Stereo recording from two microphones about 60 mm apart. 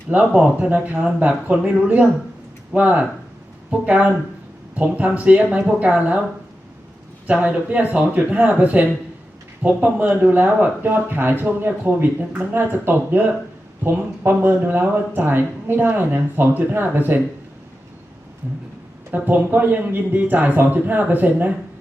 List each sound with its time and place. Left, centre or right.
0.1 s a man's voice: right
7.4 s a man's voice: right
19.1 s a man's voice: right